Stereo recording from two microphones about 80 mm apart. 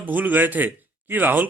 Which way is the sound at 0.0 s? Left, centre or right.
Right.